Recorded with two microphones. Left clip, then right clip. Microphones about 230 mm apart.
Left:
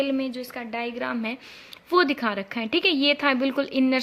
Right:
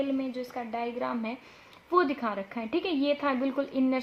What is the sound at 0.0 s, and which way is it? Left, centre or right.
A woman's voice, left.